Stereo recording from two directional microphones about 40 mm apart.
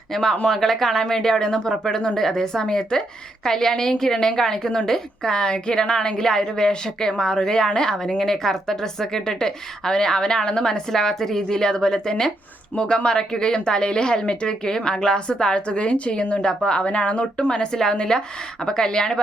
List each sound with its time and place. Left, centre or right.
0.1 s a woman's voice: centre; by 17.4 s left
17.5 s a woman's voice: centre